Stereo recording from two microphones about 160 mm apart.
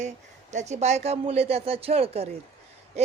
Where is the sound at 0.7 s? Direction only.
45° right (ahead or behind).